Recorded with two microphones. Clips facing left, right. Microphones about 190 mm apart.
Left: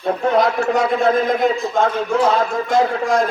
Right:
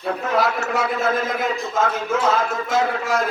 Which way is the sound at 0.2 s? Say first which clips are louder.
Left 6 dB; 30° left (ahead or behind).